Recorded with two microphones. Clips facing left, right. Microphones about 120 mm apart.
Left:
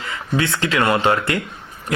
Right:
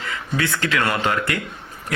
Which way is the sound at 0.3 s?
25° left (ahead or behind).